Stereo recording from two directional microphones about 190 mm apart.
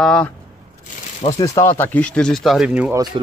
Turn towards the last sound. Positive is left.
turn(degrees=-20)  # may be behind; listen again after turning